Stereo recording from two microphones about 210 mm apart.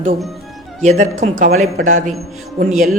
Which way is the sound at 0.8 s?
35° right (ahead or behind).